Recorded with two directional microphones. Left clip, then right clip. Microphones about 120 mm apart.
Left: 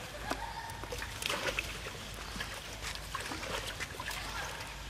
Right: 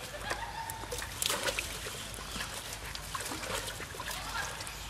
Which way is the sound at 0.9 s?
10° right (ahead or behind).